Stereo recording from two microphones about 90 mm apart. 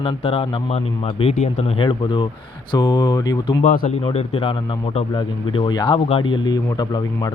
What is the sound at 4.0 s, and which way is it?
Speech, 90° left.